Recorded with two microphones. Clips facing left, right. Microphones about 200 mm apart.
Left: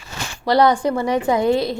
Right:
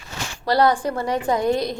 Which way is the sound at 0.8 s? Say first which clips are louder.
Left 4 dB; 15° left (ahead or behind).